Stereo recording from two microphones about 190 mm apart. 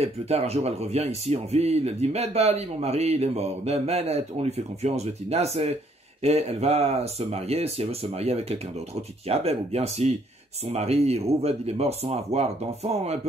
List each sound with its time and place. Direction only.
0.0 s speech: 35° right (ahead or behind)